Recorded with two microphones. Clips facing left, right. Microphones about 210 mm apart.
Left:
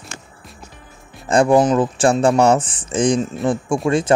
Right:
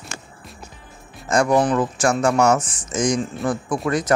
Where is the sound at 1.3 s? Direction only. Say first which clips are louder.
Left 4 dB; 30° left (ahead or behind).